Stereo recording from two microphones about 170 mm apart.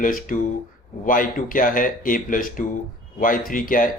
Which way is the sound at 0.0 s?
55° left (ahead or behind).